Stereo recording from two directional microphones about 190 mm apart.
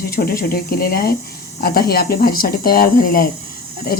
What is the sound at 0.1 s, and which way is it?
Speech, 55° left (ahead or behind).